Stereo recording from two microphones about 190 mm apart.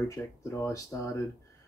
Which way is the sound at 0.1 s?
15° left (ahead or behind).